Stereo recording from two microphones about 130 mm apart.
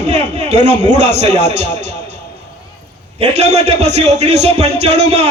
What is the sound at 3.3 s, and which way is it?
A man's voice, 55° right (ahead or behind).